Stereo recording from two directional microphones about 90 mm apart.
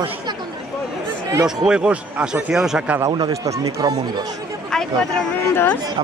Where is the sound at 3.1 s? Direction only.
40° right (ahead or behind).